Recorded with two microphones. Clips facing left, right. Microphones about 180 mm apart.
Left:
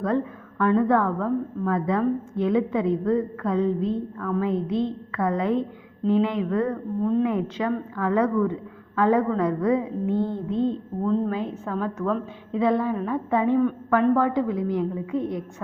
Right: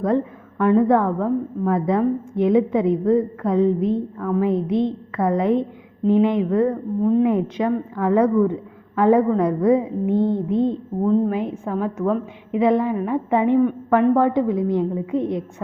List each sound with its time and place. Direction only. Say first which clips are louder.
0.6 s a woman's voice: right 4 dB; 15° right (ahead or behind)